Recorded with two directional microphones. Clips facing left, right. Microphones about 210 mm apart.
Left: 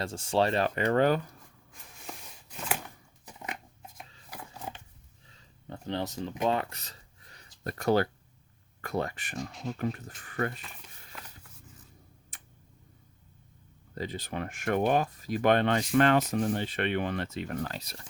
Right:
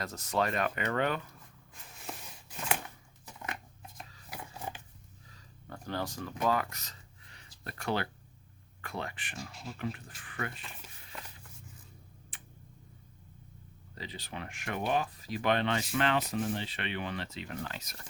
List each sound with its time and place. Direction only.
0.0 s speech: 30° left (ahead or behind)
2.1 s a sound: 5° right (ahead or behind)
3.2 s dog: 15° left (ahead or behind)
5.6 s speech: 25° left (ahead or behind); by 10.5 s 40° left (ahead or behind)
12.3 s tick-tock: 45° left (ahead or behind)
13.9 s speech: 45° left (ahead or behind)